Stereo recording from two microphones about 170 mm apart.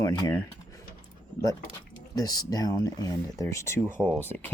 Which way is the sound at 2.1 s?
20° left (ahead or behind).